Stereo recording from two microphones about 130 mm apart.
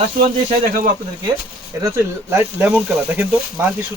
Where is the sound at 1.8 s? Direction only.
20° right (ahead or behind).